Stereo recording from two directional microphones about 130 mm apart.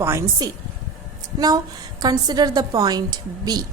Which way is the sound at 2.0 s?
30° right (ahead or behind).